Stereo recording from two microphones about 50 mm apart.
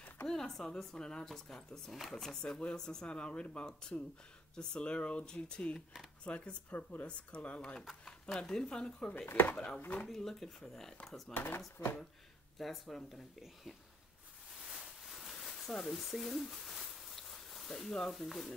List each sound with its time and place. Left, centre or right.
0.3 s a sound: centre
0.9 s speech: centre
2.4 s speech: centre
7.9 s speech: centre
9.3 s speech: left
9.8 s speech: left
10.0 s speech: centre
11.8 s speech: left
12.5 s speech: centre
14.5 s a sound: centre